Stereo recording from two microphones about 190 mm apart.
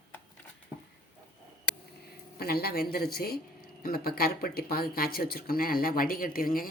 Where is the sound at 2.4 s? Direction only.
55° left (ahead or behind).